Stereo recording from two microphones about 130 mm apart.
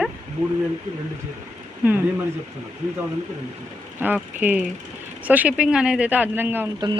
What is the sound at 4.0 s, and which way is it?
Speech, 15° right (ahead or behind).